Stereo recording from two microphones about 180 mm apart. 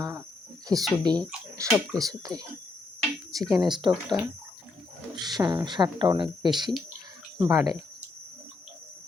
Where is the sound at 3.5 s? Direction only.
25° right (ahead or behind).